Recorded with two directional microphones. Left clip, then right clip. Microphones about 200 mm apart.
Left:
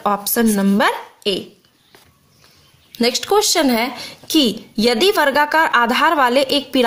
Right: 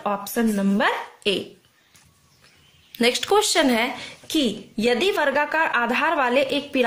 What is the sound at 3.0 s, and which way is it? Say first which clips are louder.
Speech: left 3 dB; 20° left (ahead or behind).